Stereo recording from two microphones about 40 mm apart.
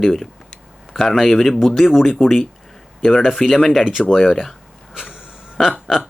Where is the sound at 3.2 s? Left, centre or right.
Centre.